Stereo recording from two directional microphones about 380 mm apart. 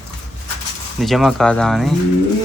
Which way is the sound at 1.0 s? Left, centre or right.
Centre.